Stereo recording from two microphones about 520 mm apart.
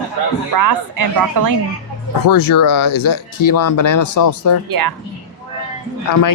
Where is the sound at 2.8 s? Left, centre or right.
Left.